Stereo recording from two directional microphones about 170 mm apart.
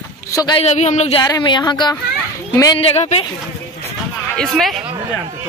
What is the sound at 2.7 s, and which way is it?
Speech, 40° left (ahead or behind).